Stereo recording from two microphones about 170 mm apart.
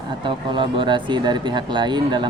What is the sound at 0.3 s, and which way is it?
Speech, 30° right (ahead or behind).